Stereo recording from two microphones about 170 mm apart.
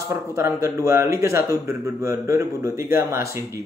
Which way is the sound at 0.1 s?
15° right (ahead or behind).